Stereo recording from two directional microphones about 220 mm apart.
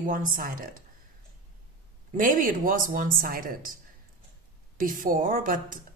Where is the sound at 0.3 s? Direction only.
40° right (ahead or behind).